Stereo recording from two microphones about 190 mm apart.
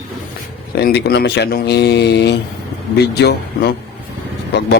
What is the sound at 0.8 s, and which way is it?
Speech, 55° left (ahead or behind).